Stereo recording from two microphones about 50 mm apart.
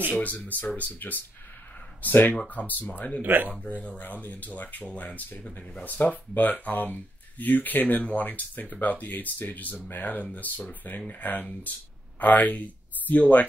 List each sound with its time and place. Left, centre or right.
0.2 s speech: left
3.2 s speech: right
3.6 s speech: left